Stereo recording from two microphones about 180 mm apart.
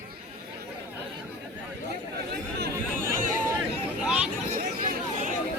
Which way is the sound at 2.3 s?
60° right (ahead or behind).